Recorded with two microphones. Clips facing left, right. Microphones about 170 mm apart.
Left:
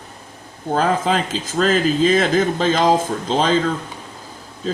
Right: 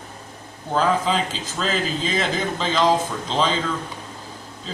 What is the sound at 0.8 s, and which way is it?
Speech, 50° left (ahead or behind).